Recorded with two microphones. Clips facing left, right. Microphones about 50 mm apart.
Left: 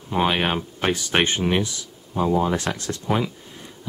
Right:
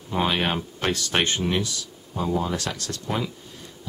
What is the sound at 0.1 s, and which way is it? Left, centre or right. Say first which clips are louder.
Speech: left 3 dB; centre.